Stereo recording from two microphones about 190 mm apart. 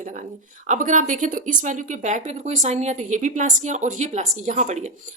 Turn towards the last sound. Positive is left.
turn(degrees=-40)  # may be behind; listen again after turning